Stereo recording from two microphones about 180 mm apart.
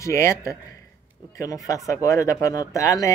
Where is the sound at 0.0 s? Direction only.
15° left (ahead or behind).